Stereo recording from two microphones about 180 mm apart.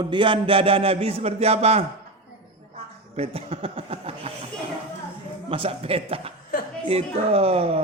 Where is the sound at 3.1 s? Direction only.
35° right (ahead or behind).